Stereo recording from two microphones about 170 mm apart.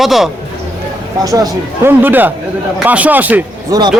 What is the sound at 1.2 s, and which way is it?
A man's voice, 20° right (ahead or behind).